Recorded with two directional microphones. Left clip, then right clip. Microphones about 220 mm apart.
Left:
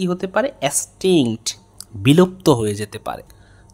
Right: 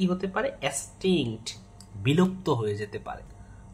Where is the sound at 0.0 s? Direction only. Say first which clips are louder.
Left 8 dB; 50° left (ahead or behind).